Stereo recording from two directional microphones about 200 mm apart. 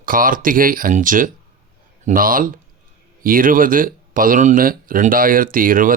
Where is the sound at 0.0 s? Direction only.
45° right (ahead or behind).